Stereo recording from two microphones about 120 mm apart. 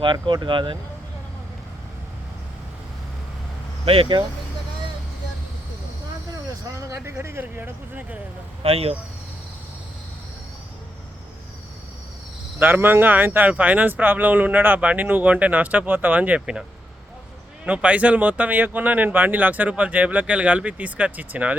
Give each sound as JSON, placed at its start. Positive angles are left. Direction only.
{"t": 0.0, "sound": "speech", "side_deg": -40}
{"t": 3.8, "sound": "speech", "side_deg": -50}
{"t": 6.5, "sound": "speech", "side_deg": -25}
{"t": 8.6, "sound": "speech", "side_deg": -55}
{"t": 12.5, "sound": "speech", "side_deg": -15}
{"t": 17.7, "sound": "speech", "side_deg": -10}